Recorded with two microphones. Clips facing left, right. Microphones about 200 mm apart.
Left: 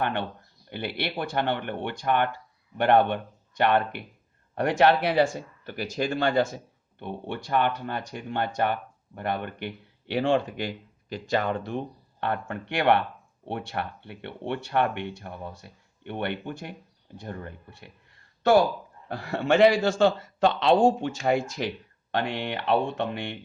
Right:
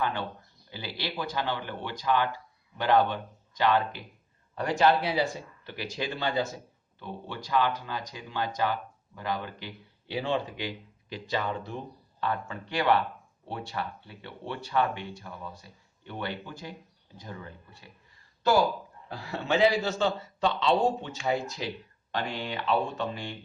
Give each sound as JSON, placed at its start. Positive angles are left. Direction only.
{"t": 0.0, "sound": "speech", "side_deg": 65}
{"t": 5.3, "sound": "speech", "side_deg": 45}
{"t": 7.0, "sound": "speech", "side_deg": 60}
{"t": 11.6, "sound": "speech", "side_deg": 65}
{"t": 20.5, "sound": "speech", "side_deg": 65}
{"t": 21.0, "sound": "speech", "side_deg": 50}
{"t": 22.1, "sound": "speech", "side_deg": 65}